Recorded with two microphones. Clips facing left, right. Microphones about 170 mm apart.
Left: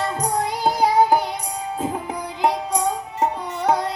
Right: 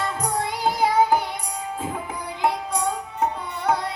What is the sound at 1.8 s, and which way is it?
Music, 35° left (ahead or behind).